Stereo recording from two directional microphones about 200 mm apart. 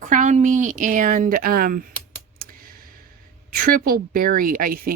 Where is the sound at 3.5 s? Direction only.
45° right (ahead or behind).